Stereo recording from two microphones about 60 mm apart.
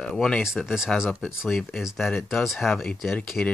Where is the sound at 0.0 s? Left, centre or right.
Centre.